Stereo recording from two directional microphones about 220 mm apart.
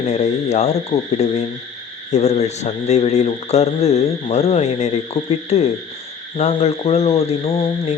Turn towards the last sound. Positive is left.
turn(degrees=30)  # may be behind; listen again after turning